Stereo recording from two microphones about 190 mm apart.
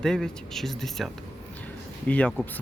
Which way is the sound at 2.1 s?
5° left (ahead or behind).